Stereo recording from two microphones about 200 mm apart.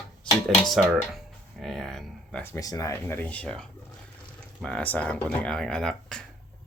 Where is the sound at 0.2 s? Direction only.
Centre (ahead or behind).